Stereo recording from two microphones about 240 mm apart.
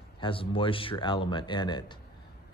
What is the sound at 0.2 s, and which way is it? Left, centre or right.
Speech, left.